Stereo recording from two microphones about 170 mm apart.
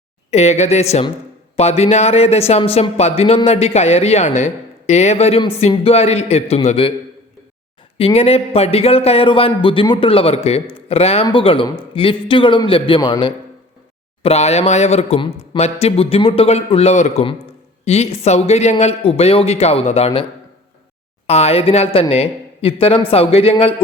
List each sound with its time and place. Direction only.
0.3 s speech: 40° left (ahead or behind)
7.9 s speech: 35° left (ahead or behind)
14.2 s speech: 40° left (ahead or behind)
21.2 s speech: 40° left (ahead or behind)